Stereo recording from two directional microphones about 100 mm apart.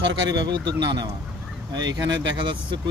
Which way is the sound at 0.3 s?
50° right (ahead or behind).